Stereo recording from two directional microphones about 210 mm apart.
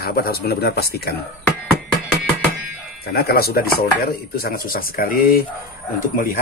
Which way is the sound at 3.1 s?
45° left (ahead or behind).